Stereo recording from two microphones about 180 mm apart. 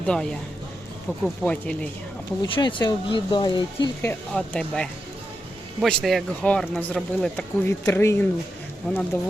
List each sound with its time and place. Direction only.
0.0 s speech: 5° left (ahead or behind)
2.4 s speech: 25° left (ahead or behind)
4.0 s speech: 10° left (ahead or behind)